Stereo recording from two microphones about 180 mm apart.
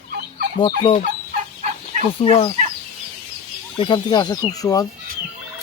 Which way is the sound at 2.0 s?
35° left (ahead or behind).